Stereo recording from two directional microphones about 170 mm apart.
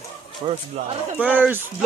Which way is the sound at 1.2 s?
10° right (ahead or behind).